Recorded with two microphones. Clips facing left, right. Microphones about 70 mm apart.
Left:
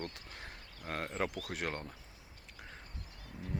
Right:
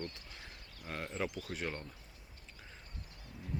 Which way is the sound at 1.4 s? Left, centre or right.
Left.